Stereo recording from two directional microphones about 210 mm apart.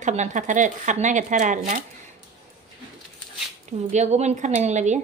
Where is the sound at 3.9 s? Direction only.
35° right (ahead or behind).